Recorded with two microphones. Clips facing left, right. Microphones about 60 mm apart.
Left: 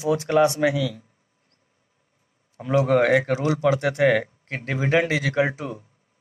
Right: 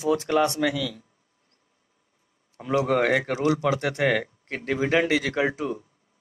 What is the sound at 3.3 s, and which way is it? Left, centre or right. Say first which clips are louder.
Speech: even; centre.